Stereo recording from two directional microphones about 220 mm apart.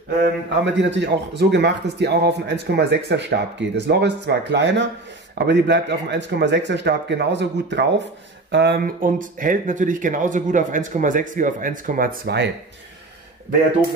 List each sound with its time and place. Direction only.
0.7 s a man's voice: 55° right (ahead or behind)